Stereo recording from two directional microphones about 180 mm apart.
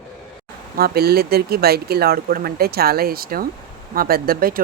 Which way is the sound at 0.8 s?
60° right (ahead or behind).